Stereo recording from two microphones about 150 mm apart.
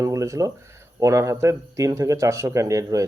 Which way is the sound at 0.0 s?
20° right (ahead or behind).